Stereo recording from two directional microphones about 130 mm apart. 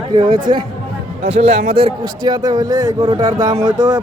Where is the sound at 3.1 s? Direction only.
40° right (ahead or behind).